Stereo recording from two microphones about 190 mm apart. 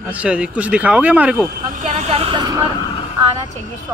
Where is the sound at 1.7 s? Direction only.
40° right (ahead or behind); by 2.6 s 25° right (ahead or behind).